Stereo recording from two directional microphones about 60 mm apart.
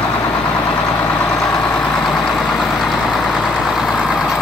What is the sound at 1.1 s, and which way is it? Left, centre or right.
Vehicle, left.